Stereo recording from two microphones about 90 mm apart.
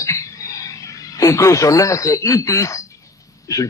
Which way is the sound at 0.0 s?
35° left (ahead or behind).